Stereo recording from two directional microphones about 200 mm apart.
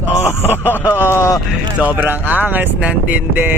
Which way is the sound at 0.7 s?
10° left (ahead or behind).